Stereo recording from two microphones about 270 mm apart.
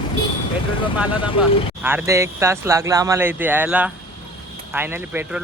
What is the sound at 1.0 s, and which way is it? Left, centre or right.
Speech, centre.